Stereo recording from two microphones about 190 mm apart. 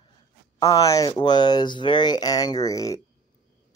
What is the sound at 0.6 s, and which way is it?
Speech, 20° left (ahead or behind).